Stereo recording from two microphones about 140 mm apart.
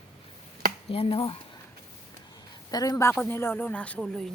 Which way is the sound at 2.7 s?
25° left (ahead or behind).